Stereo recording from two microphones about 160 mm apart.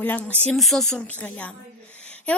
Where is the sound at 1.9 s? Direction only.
10° left (ahead or behind).